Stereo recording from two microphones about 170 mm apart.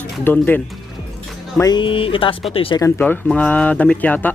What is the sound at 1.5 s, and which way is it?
Speech, 25° left (ahead or behind).